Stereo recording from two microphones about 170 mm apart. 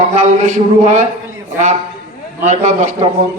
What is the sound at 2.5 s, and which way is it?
Speech, 45° right (ahead or behind).